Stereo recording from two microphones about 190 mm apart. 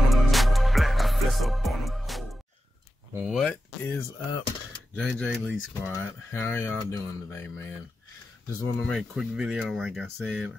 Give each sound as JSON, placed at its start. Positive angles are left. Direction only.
{"t": 0.0, "sound": "music", "side_deg": 0}
{"t": 3.2, "sound": "a sound", "side_deg": 0}
{"t": 3.9, "sound": "a sound", "side_deg": 20}
{"t": 4.9, "sound": "speech", "side_deg": 0}
{"t": 5.9, "sound": "speech", "side_deg": 15}
{"t": 8.7, "sound": "speech", "side_deg": 0}